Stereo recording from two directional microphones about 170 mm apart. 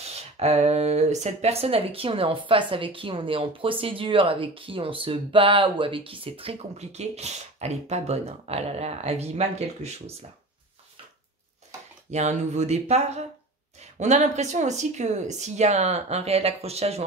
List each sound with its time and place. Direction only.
0.4 s speech: 40° right (ahead or behind)
12.1 s speech: 40° right (ahead or behind)